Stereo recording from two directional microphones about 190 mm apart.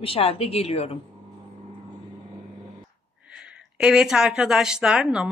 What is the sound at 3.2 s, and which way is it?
Speech, 5° right (ahead or behind).